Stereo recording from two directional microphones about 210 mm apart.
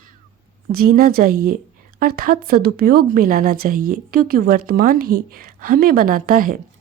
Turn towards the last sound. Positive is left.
turn(degrees=-40)  # may be behind; listen again after turning